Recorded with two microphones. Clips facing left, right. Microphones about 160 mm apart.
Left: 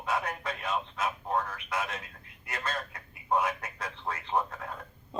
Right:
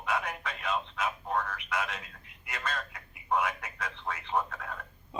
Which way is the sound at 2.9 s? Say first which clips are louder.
Left 2 dB; 30° left (ahead or behind).